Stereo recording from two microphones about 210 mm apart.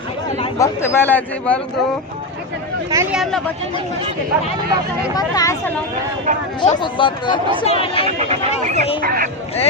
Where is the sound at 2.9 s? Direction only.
15° right (ahead or behind).